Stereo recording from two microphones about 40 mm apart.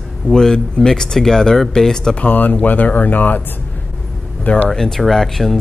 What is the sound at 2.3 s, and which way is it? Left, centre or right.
Speech, left.